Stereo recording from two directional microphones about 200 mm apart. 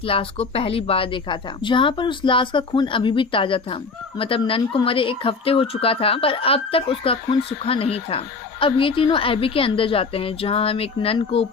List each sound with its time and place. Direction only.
0.0 s speech: 25° left (ahead or behind)